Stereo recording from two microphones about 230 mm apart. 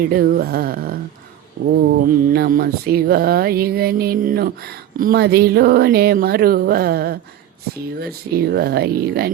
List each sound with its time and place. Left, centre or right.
0.1 s speech: right